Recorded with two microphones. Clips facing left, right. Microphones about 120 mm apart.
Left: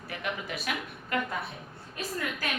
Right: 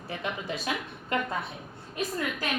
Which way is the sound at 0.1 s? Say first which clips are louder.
Right 2 dB; 25° right (ahead or behind).